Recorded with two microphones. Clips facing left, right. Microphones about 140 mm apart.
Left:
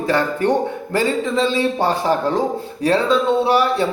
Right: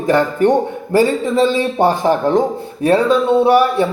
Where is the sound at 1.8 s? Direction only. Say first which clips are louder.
Right 4 dB; 20° right (ahead or behind).